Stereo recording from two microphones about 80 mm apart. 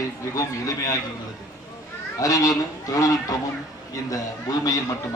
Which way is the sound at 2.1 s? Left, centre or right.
Left.